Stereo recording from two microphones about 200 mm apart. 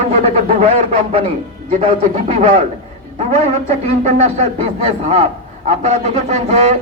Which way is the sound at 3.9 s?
30° right (ahead or behind).